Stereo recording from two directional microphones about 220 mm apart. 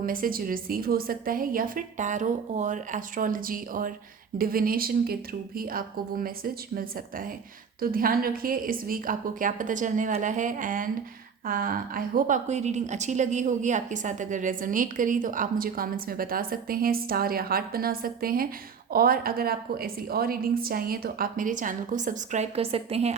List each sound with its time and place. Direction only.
0.0 s a woman's voice: 40° right (ahead or behind)